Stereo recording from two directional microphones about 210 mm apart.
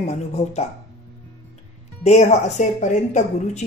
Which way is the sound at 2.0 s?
35° left (ahead or behind).